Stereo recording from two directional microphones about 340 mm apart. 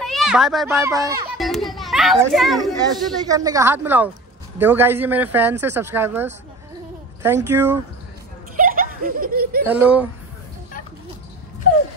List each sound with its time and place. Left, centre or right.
0.0 s a child's voice: centre
1.5 s children playing: centre
2.8 s speech: centre
7.4 s speech: centre
8.5 s snicker: right
9.7 s speech: centre